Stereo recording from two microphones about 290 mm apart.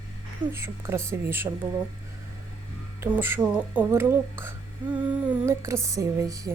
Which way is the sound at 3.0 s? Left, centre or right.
Centre.